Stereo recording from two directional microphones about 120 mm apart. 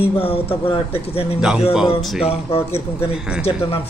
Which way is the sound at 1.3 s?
5° right (ahead or behind).